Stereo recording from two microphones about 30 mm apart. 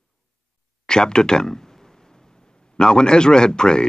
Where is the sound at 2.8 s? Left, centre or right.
Left.